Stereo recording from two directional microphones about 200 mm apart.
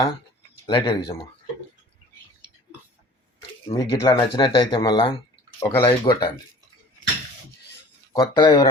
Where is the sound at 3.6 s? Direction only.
25° left (ahead or behind).